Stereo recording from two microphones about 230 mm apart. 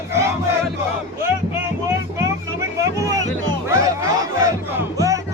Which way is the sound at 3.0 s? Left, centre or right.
Centre.